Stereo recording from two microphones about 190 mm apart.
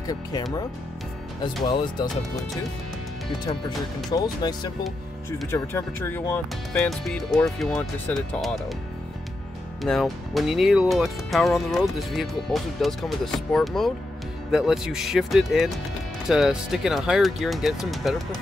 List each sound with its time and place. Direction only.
0.0 s speech: 20° left (ahead or behind)
4.1 s speech: 20° left (ahead or behind); by 8.5 s 5° left (ahead or behind)
9.8 s speech: centre (ahead or behind)